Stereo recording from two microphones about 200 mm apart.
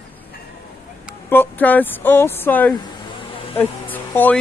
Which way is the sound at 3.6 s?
10° left (ahead or behind).